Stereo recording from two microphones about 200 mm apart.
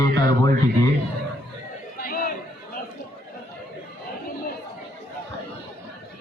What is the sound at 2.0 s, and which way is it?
Chatter, 45° left (ahead or behind).